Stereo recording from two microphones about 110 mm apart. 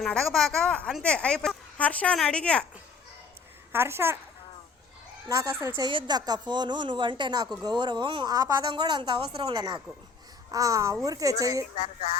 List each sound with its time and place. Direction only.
0.0 s a woman's voice: 5° left (ahead or behind)
3.7 s speech: 20° right (ahead or behind)
5.3 s a child's voice: 30° right (ahead or behind)
5.9 s a woman's voice: 45° right (ahead or behind)
11.8 s music: 90° left